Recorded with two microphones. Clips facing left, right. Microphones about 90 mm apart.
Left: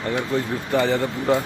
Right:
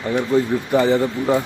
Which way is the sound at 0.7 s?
15° right (ahead or behind).